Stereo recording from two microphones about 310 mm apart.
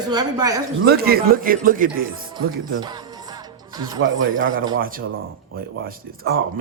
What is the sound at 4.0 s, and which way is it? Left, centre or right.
Speech, right.